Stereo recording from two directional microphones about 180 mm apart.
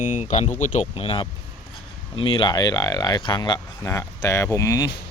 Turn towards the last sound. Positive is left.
turn(degrees=20)  # may be behind; listen again after turning